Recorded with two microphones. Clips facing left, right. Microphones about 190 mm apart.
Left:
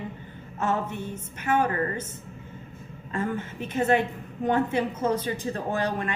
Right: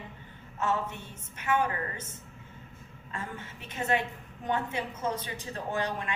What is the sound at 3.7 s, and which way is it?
A woman's voice, 50° left (ahead or behind).